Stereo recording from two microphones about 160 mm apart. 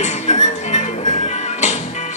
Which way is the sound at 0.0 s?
45° left (ahead or behind).